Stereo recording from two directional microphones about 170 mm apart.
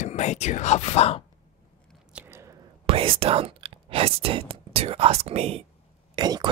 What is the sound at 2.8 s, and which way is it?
Speech, 30° right (ahead or behind).